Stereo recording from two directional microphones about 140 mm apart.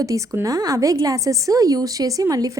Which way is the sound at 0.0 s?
25° right (ahead or behind).